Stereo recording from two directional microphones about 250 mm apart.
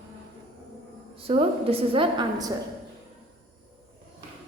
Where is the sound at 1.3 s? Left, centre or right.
Right.